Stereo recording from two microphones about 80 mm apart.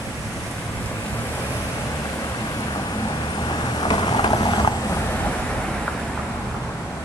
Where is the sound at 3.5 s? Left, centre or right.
Left.